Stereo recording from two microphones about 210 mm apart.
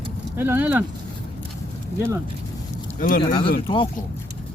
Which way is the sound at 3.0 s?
40° left (ahead or behind).